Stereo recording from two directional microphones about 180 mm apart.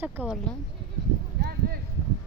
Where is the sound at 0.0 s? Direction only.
10° right (ahead or behind).